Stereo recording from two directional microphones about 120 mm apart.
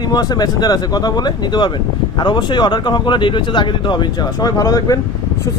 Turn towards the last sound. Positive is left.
turn(degrees=30)  # may be behind; listen again after turning